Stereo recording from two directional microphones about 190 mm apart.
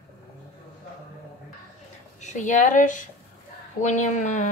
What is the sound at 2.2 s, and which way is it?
A woman's voice, 40° left (ahead or behind).